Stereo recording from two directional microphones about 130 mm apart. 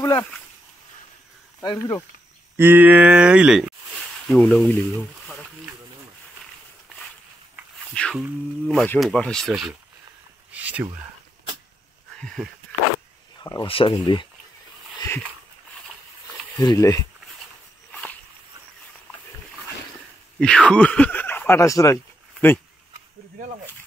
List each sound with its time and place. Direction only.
0.0 s speech: 20° left (ahead or behind)
1.6 s speech: 30° left (ahead or behind)
2.5 s speech: 15° right (ahead or behind); by 4.8 s 10° left (ahead or behind)
5.2 s a sound: centre (ahead or behind)
8.1 s a sound: centre (ahead or behind)
10.5 s speech: 10° right (ahead or behind)
12.2 s a sound: 5° left (ahead or behind)
13.4 s speech: 30° left (ahead or behind)
13.7 s speech: 45° left (ahead or behind)
16.6 s speech: 25° left (ahead or behind)
20.3 s speech: 5° left (ahead or behind); by 21.9 s 25° left (ahead or behind)
21.9 s a sound: 15° left (ahead or behind)